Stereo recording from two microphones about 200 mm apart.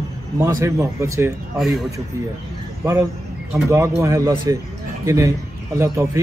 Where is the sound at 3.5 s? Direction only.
15° right (ahead or behind).